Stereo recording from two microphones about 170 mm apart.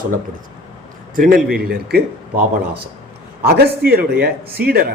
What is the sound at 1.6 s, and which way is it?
A man's voice, 65° right (ahead or behind).